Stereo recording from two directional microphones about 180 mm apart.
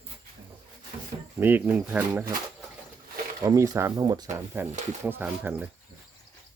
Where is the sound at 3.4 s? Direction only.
20° right (ahead or behind).